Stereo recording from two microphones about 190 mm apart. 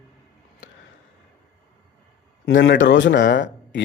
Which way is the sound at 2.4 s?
75° left (ahead or behind).